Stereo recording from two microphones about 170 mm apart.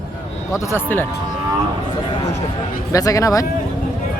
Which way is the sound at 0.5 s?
15° left (ahead or behind).